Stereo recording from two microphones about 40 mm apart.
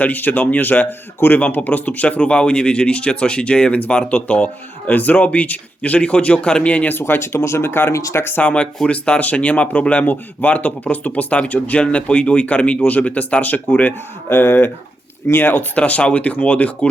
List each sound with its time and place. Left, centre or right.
0.0 s speech: left
7.2 s speech: left
8.4 s speech: left
11.8 s speech: left
14.3 s speech: left
15.3 s speech: left
15.8 s speech: left